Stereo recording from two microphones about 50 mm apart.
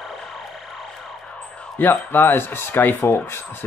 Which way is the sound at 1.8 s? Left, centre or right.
Left.